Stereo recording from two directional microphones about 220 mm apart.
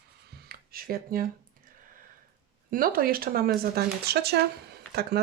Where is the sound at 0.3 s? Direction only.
45° right (ahead or behind).